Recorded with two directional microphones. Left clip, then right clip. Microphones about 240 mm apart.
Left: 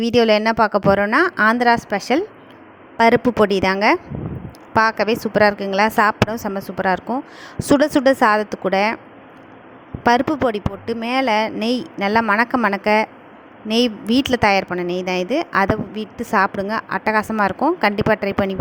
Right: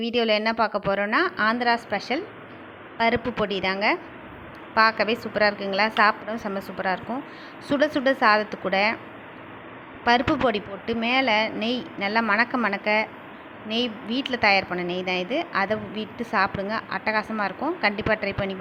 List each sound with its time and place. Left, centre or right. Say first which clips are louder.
0.0 s a woman's voice: left 7 dB; left
10.0 s a woman's voice: left 4 dB; left